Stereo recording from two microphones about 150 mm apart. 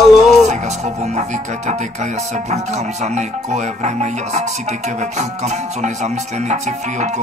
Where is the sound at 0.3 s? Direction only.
50° right (ahead or behind).